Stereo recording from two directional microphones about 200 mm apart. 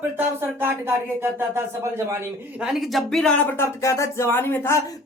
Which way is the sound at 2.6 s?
Centre (ahead or behind).